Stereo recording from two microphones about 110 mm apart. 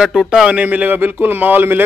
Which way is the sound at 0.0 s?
5° right (ahead or behind).